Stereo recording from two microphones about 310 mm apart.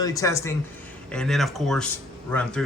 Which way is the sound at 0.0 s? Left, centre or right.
Centre.